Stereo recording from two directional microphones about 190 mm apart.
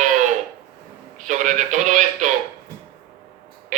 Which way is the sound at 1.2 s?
40° right (ahead or behind).